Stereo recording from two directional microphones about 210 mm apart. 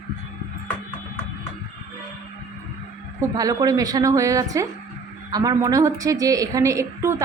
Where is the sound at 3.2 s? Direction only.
15° right (ahead or behind).